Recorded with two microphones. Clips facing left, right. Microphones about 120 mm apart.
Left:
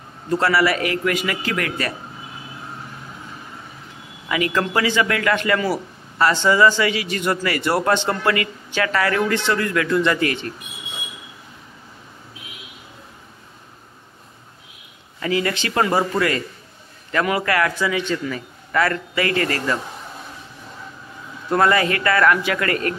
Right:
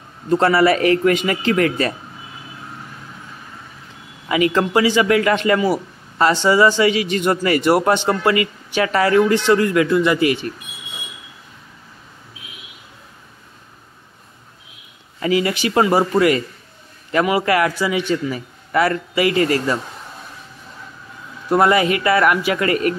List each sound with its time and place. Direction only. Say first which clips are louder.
0.3 s a man's voice: right 4 dB; 25° right (ahead or behind)
4.3 s a man's voice: right 4 dB; 20° right (ahead or behind)
9.8 s a man's voice: right 3 dB; 10° right (ahead or behind)
15.2 s a man's voice: right 4 dB; 15° right (ahead or behind)
21.5 s a man's voice: right 3 dB; 15° right (ahead or behind)